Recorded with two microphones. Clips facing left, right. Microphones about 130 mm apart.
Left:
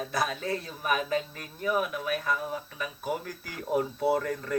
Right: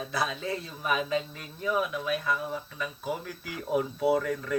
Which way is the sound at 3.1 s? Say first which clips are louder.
Left 3 dB; 45° left (ahead or behind).